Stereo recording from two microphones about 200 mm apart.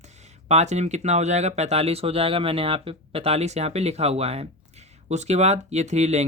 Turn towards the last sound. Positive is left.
turn(degrees=-35)  # may be behind; listen again after turning